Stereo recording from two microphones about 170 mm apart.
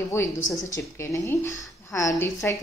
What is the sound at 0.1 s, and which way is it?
A woman's voice, 15° left (ahead or behind).